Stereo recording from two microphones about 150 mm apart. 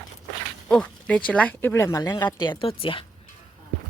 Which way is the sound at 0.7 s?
5° left (ahead or behind).